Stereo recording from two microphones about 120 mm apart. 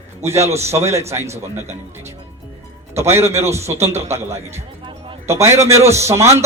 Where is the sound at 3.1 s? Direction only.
20° right (ahead or behind).